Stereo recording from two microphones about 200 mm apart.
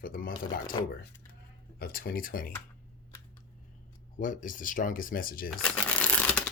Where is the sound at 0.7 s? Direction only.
20° left (ahead or behind).